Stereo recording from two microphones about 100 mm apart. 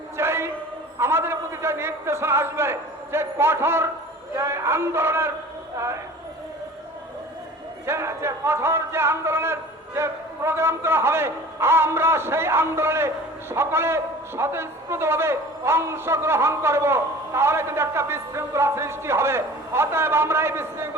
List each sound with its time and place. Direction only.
0.2 s a sound: 25° right (ahead or behind)
0.9 s a man's voice: 25° right (ahead or behind)
7.9 s a man's voice: 25° right (ahead or behind)